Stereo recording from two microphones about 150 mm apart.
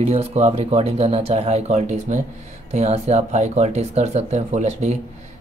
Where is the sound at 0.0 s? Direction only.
40° right (ahead or behind).